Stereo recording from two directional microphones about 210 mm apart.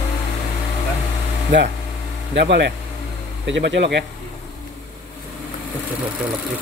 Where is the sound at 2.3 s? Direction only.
55° right (ahead or behind).